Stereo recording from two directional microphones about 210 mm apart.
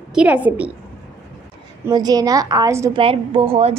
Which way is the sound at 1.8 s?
20° right (ahead or behind).